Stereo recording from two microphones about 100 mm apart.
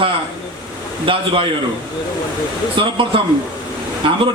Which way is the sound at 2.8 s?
60° right (ahead or behind).